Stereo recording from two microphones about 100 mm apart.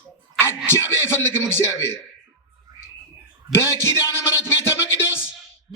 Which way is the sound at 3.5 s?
30° left (ahead or behind).